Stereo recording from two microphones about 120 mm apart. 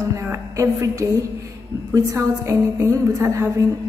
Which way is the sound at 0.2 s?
25° right (ahead or behind).